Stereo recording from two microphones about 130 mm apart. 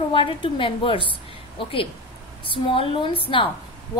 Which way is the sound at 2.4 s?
40° left (ahead or behind).